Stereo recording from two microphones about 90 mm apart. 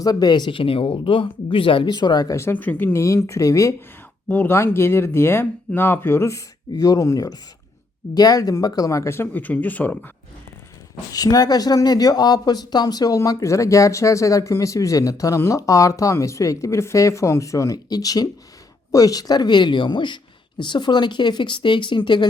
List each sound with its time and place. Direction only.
0.0 s speech: 45° left (ahead or behind)
0.6 s speech: 90° left; by 2.3 s 50° left (ahead or behind)
2.3 s speech: 25° left (ahead or behind)
4.3 s speech: 20° left (ahead or behind)
9.2 s speech: 20° left (ahead or behind)
11.1 s speech: 45° left (ahead or behind); by 22.3 s 60° left (ahead or behind)